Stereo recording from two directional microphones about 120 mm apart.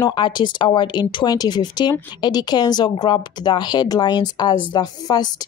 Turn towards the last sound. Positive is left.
turn(degrees=35)  # may be behind; listen again after turning